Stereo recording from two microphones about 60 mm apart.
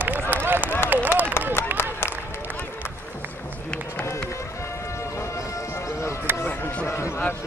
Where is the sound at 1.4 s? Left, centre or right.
Left.